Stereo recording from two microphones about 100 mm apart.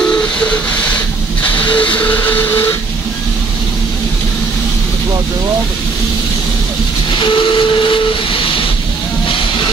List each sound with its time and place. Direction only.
0.0 s train: 10° left (ahead or behind)
7.1 s steam whistle: 55° left (ahead or behind)